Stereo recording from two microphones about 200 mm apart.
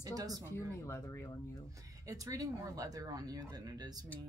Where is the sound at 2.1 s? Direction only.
15° right (ahead or behind).